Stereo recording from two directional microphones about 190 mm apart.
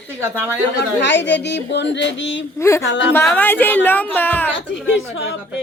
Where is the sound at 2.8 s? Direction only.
70° left (ahead or behind).